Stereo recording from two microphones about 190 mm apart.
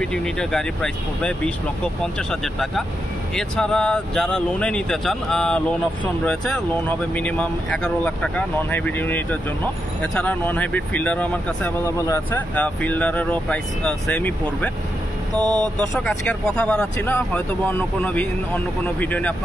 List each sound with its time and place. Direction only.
0.0 s speech: 5° left (ahead or behind)
15.4 s speech: 20° right (ahead or behind)
15.9 s speech: 5° left (ahead or behind)